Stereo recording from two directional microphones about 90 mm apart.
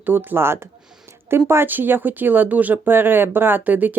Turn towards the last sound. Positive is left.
turn(degrees=-20)  # may be behind; listen again after turning